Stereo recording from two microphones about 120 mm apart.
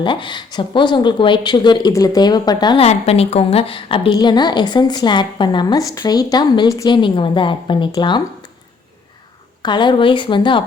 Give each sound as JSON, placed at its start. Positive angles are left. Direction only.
{"t": 0.0, "sound": "a woman's voice", "side_deg": 40}
{"t": 2.7, "sound": "a woman's voice", "side_deg": 60}
{"t": 6.8, "sound": "a woman's voice", "side_deg": 40}
{"t": 9.6, "sound": "a woman's voice", "side_deg": 40}